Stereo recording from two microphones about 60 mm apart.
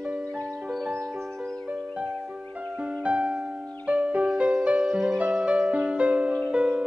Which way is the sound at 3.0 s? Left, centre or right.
Right.